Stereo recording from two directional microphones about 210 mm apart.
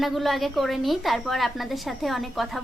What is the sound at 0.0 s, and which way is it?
A woman's voice, centre (ahead or behind).